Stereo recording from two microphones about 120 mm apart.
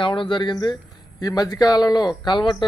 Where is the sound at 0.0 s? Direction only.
45° left (ahead or behind).